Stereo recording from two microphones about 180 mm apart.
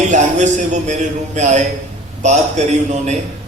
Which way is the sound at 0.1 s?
40° right (ahead or behind).